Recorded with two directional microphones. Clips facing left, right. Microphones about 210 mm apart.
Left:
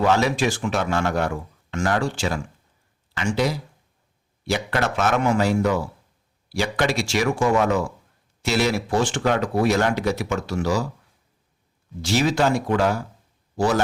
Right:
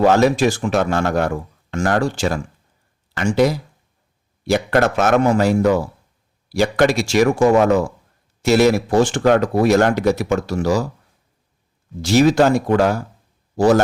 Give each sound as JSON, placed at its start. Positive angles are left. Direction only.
{"t": 0.0, "sound": "speech", "side_deg": -45}
{"t": 12.0, "sound": "speech", "side_deg": -45}